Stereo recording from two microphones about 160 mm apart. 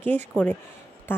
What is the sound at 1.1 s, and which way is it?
Speech, 15° left (ahead or behind).